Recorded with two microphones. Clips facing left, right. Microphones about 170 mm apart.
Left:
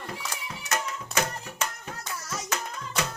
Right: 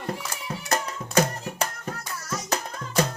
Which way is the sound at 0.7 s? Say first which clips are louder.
Right 4 dB; 35° right (ahead or behind).